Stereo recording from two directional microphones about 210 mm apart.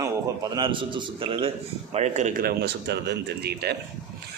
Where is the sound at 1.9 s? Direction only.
35° right (ahead or behind).